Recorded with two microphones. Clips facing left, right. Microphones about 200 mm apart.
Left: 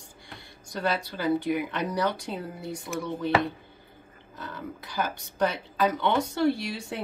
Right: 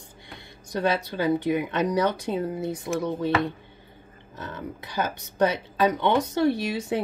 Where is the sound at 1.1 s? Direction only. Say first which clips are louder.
Right 3 dB; 20° right (ahead or behind).